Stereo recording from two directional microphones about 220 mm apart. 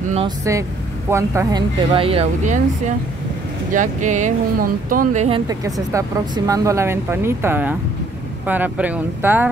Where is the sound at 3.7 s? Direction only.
35° right (ahead or behind).